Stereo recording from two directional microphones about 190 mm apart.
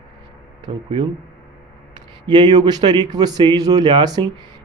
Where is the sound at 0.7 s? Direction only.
25° right (ahead or behind).